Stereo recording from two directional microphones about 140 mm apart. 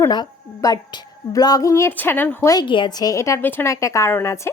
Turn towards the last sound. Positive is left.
turn(degrees=20)  # may be behind; listen again after turning